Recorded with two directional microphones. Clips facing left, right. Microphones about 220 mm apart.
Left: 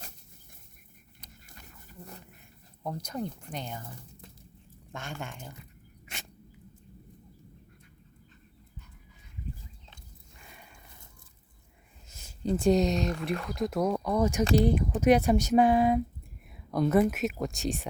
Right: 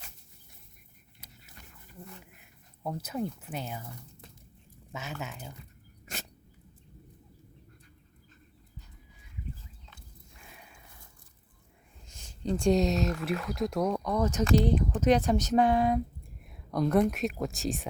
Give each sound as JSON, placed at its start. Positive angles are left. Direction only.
{"t": 2.8, "sound": "speech", "side_deg": -5}
{"t": 4.9, "sound": "speech", "side_deg": -5}
{"t": 10.3, "sound": "a sound", "side_deg": 0}
{"t": 12.0, "sound": "speech", "side_deg": 5}